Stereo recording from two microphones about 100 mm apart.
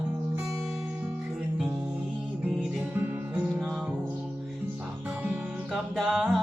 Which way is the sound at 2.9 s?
15° right (ahead or behind).